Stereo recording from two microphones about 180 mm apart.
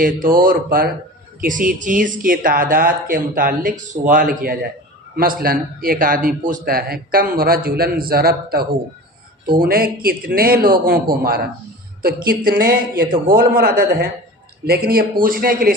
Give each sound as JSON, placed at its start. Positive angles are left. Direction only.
{"t": 0.0, "sound": "speech", "side_deg": -50}